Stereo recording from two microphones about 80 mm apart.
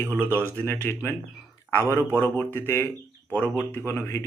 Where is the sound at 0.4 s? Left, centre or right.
Left.